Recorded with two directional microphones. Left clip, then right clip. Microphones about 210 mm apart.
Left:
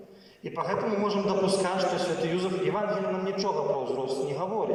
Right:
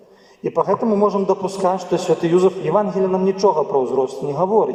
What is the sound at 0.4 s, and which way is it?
A man's voice, 55° right (ahead or behind).